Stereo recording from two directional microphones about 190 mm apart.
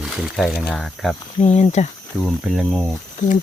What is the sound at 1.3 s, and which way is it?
Speech, 35° left (ahead or behind).